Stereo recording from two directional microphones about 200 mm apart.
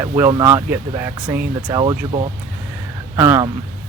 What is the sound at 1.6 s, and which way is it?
Speech, 20° right (ahead or behind).